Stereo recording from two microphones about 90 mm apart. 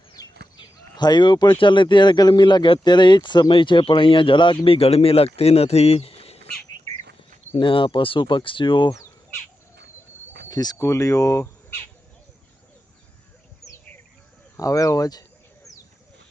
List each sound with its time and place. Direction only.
0.1 s a sound: 50° left (ahead or behind)
1.5 s speech: 65° left (ahead or behind); by 6.3 s 90° left
7.5 s speech: 75° left (ahead or behind)
10.5 s speech: 45° left (ahead or behind)
10.8 s speech: 35° left (ahead or behind)
13.6 s bird: 35° left (ahead or behind)
14.5 s speech: 40° left (ahead or behind)